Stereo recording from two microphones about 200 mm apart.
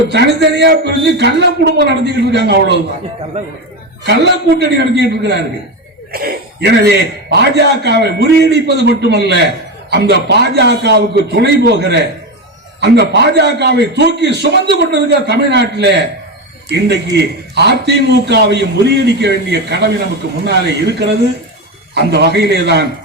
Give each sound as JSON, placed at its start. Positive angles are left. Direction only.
{"t": 0.1, "sound": "a man's voice", "side_deg": -60}
{"t": 4.0, "sound": "a man's voice", "side_deg": -60}